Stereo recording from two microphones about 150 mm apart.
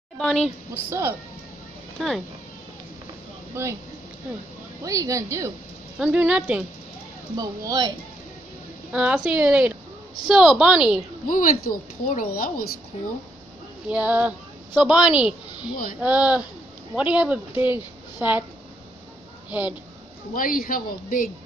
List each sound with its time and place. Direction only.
0.2 s a woman's voice: 5° left (ahead or behind)
0.8 s a woman's voice: 15° right (ahead or behind)
2.0 s speech: centre (ahead or behind)
3.6 s a woman's voice: 15° right (ahead or behind)
4.8 s a woman's voice: 20° right (ahead or behind)
5.9 s a woman's voice: 5° right (ahead or behind)
7.3 s a woman's voice: 25° right (ahead or behind)
8.9 s a woman's voice: 5° right (ahead or behind)
11.2 s speech: 65° left (ahead or behind)
13.8 s a woman's voice: 10° right (ahead or behind)
20.3 s speech: 65° left (ahead or behind)